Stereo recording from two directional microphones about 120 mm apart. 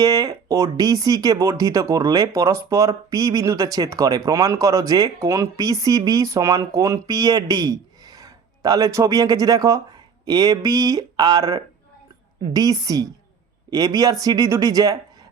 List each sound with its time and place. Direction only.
0.0 s speech: 30° right (ahead or behind)